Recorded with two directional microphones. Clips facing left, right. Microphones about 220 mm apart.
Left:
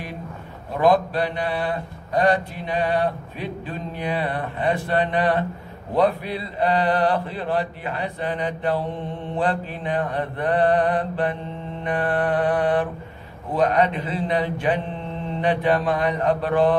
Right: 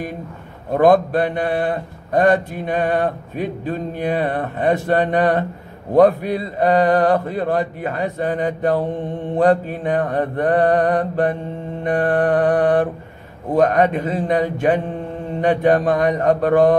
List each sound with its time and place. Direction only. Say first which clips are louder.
0.7 s a man's voice: right 5 dB; 50° right (ahead or behind)